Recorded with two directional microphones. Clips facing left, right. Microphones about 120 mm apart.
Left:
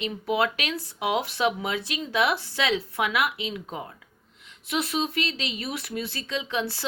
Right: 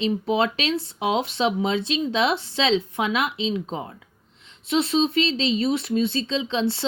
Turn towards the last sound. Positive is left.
turn(degrees=-25)  # may be behind; listen again after turning